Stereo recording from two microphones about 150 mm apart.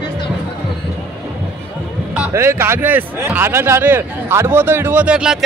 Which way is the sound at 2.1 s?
15° right (ahead or behind).